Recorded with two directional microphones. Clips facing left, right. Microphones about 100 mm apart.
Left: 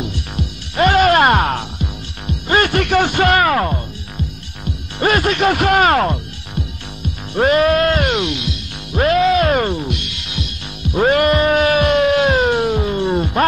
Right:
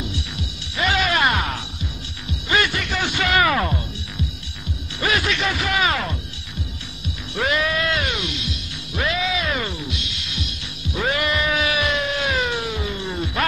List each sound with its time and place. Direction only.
0.7 s music: 50° left (ahead or behind)
5.0 s speech: 50° left (ahead or behind)
8.9 s music: 50° left (ahead or behind)